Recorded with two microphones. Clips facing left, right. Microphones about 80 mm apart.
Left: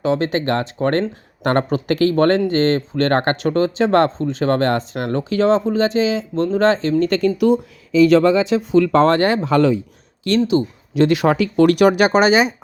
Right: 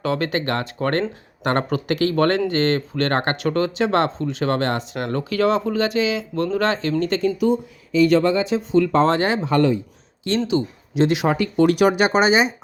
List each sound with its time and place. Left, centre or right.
0.0 s speech: left
7.0 s speech: left
7.3 s speech: left
9.5 s speech: left
10.5 s speech: left
11.3 s speech: left
12.0 s speech: centre